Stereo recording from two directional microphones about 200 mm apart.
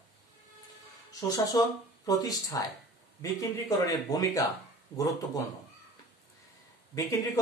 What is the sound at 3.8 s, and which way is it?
Speech, 20° left (ahead or behind).